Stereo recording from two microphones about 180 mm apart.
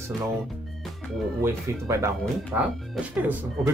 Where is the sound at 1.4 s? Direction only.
15° right (ahead or behind).